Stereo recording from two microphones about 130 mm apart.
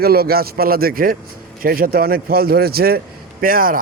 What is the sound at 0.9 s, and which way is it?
Speech, 90° right.